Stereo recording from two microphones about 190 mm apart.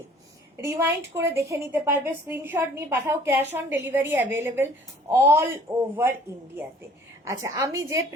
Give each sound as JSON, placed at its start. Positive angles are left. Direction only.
{"t": 0.5, "sound": "a woman's voice", "side_deg": -15}
{"t": 7.3, "sound": "a woman's voice", "side_deg": -15}